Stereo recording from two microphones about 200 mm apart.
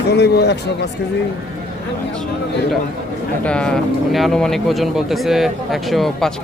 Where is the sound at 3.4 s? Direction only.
5° left (ahead or behind).